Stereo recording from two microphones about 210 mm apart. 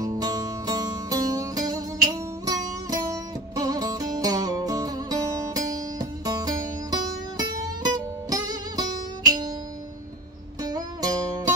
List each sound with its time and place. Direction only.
0.0 s music: 15° right (ahead or behind)
10.6 s music: 20° right (ahead or behind)